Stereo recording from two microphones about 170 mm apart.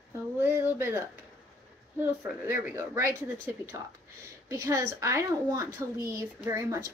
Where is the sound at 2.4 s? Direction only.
15° right (ahead or behind).